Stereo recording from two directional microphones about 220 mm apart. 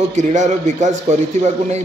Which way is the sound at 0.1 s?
35° right (ahead or behind).